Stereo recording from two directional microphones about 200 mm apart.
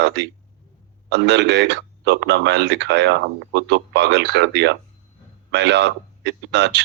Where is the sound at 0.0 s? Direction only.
60° right (ahead or behind).